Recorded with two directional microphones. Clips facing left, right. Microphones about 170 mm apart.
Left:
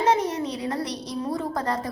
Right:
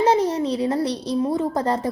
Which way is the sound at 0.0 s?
30° right (ahead or behind).